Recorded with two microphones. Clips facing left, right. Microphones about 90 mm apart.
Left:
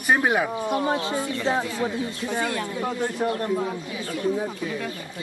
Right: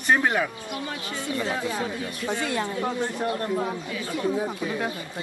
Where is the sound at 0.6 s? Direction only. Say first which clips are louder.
Left 9 dB; 35° left (ahead or behind).